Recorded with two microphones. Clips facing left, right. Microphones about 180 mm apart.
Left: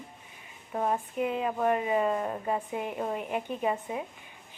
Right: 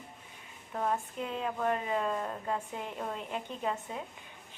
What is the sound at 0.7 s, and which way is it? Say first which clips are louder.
A woman's voice: left 4 dB; 15° left (ahead or behind).